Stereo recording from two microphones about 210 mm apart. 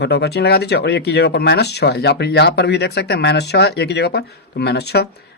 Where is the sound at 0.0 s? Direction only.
55° left (ahead or behind).